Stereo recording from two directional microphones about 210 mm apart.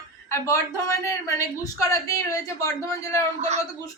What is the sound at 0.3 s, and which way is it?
Speech, 15° left (ahead or behind).